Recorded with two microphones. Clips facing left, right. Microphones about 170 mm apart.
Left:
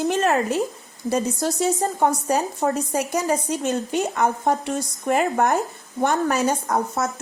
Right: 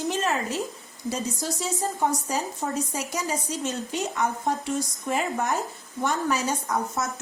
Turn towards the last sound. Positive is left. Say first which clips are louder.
# left 4 dB
turn(degrees=55)  # may be behind; listen again after turning